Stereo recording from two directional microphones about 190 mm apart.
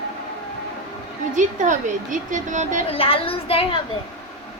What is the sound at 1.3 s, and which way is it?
A woman's voice, 40° right (ahead or behind).